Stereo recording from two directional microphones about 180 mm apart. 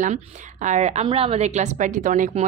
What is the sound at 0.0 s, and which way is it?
A woman's voice, 45° right (ahead or behind).